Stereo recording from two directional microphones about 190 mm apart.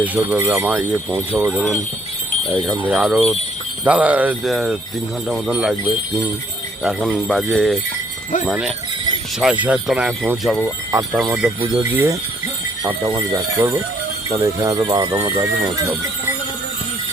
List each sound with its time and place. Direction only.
0.0 s speech: 10° right (ahead or behind)
2.8 s speech: 5° right (ahead or behind)